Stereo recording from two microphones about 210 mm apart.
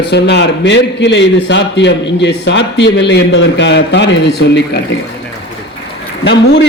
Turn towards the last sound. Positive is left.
turn(degrees=55)  # may be behind; listen again after turning